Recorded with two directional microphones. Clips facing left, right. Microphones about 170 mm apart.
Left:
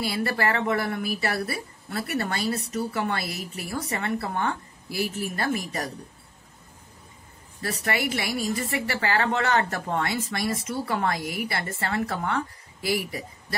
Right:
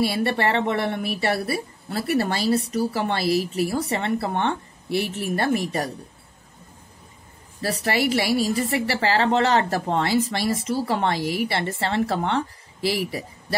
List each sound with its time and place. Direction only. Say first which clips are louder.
0.0 s a woman's voice: right 4 dB; 25° right (ahead or behind)
7.6 s a woman's voice: right 5 dB; 30° right (ahead or behind)